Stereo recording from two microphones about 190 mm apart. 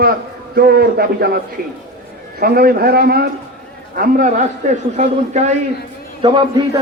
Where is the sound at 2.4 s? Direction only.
50° right (ahead or behind); by 6.4 s 30° right (ahead or behind).